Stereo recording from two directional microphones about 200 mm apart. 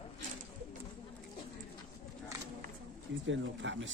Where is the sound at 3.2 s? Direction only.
65° right (ahead or behind).